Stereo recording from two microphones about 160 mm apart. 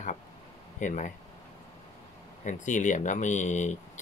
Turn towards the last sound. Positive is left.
turn(degrees=50)  # may be behind; listen again after turning